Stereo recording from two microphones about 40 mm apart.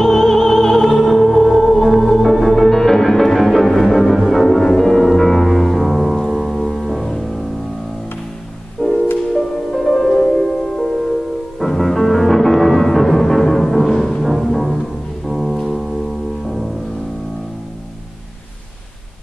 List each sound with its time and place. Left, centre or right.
0.0 s music: centre
8.8 s music: left
9.3 s music: centre
10.2 s music: centre